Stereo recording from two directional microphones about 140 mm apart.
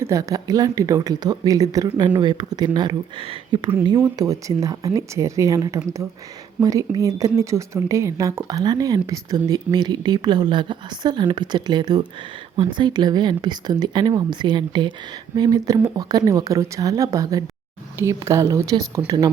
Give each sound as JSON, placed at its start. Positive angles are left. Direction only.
{"t": 0.0, "sound": "a woman's voice", "side_deg": -20}
{"t": 3.8, "sound": "a woman's voice", "side_deg": -25}